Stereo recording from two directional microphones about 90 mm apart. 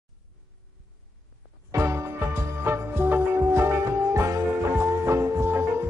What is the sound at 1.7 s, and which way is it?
Music, 35° right (ahead or behind).